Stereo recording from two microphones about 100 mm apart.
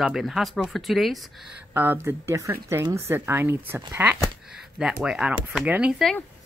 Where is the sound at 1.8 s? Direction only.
20° right (ahead or behind).